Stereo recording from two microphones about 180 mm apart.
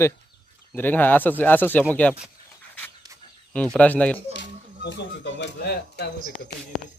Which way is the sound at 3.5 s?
5° left (ahead or behind).